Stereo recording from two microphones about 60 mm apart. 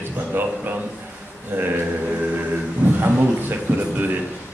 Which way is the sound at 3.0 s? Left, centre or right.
Right.